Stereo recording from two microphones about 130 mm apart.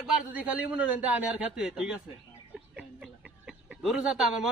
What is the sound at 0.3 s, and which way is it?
A man's voice, 10° right (ahead or behind).